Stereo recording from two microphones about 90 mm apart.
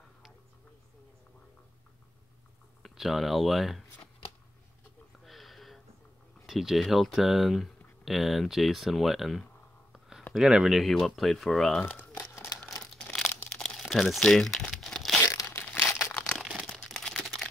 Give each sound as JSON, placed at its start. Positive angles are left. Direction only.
{"t": 2.8, "sound": "speech", "side_deg": 0}
{"t": 5.2, "sound": "a sound", "side_deg": 0}
{"t": 6.4, "sound": "speech", "side_deg": -5}
{"t": 9.9, "sound": "a sound", "side_deg": -5}
{"t": 10.3, "sound": "speech", "side_deg": -5}
{"t": 11.8, "sound": "crumpling", "side_deg": 20}
{"t": 12.9, "sound": "crumpling", "side_deg": 5}
{"t": 13.6, "sound": "tearing", "side_deg": 5}
{"t": 15.2, "sound": "crumpling", "side_deg": 35}
{"t": 16.3, "sound": "crumpling", "side_deg": 5}